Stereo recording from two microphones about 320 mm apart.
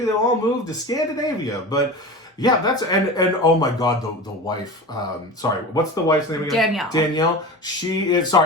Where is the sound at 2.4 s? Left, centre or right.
Centre.